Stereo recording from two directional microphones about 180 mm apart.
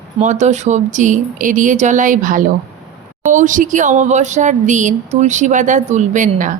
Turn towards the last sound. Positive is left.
turn(degrees=-45)  # may be behind; listen again after turning